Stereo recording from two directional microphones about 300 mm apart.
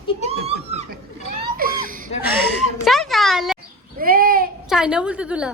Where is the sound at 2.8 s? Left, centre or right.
Centre.